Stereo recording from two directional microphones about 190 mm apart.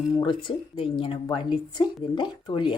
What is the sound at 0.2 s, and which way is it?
Speech, 25° left (ahead or behind).